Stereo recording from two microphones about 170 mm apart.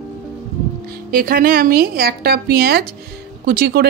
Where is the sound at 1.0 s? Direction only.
55° right (ahead or behind).